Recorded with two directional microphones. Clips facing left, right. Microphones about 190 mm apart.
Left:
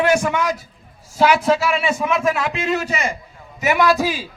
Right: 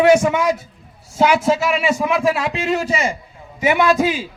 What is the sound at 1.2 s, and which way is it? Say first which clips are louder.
A man's voice: even; 25° right (ahead or behind).